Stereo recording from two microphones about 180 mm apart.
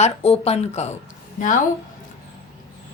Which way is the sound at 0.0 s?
35° left (ahead or behind).